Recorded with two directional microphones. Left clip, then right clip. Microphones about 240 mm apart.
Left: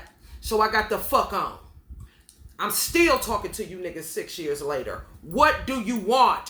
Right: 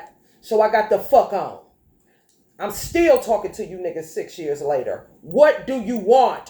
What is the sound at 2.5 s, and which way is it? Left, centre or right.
Speech, centre.